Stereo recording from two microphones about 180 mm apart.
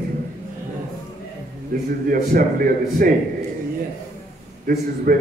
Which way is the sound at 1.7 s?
55° right (ahead or behind).